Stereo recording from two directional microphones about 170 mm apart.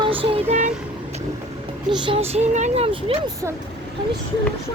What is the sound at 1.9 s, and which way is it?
Speech, 30° right (ahead or behind).